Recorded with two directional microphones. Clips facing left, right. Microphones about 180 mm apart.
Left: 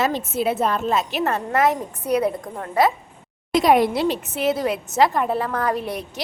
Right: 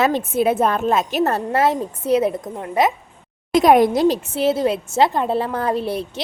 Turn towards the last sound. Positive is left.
turn(degrees=-30)  # may be behind; listen again after turning